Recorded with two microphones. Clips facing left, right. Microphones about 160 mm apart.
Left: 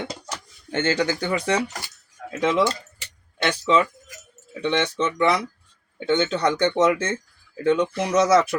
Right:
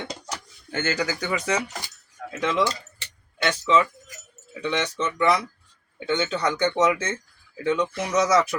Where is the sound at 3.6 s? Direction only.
35° left (ahead or behind).